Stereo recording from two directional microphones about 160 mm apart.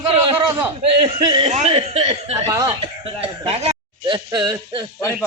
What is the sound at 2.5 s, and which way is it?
Speech, 20° right (ahead or behind).